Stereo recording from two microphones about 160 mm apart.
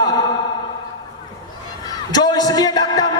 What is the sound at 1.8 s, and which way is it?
A man's voice, 25° left (ahead or behind).